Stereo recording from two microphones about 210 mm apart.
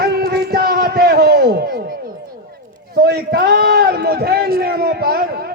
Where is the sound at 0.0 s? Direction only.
45° right (ahead or behind).